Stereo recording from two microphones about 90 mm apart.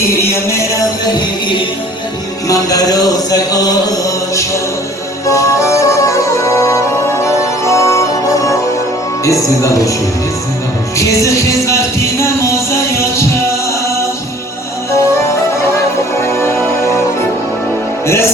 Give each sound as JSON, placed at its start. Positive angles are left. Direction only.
{"t": 0.4, "sound": "music", "side_deg": 35}
{"t": 2.5, "sound": "music", "side_deg": 40}
{"t": 5.2, "sound": "music", "side_deg": 35}
{"t": 10.9, "sound": "music", "side_deg": 35}
{"t": 16.1, "sound": "music", "side_deg": 30}